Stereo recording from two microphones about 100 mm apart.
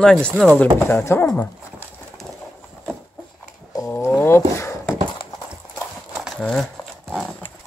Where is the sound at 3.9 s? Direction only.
25° left (ahead or behind).